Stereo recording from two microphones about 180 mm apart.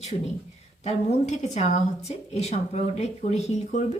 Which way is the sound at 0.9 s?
40° left (ahead or behind).